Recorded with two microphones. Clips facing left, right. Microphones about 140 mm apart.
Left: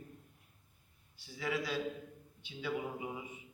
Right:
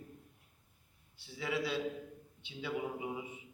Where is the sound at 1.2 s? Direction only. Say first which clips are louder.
Right 1 dB; 25° right (ahead or behind).